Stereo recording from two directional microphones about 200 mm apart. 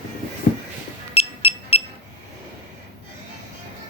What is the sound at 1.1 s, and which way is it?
Music, 30° left (ahead or behind).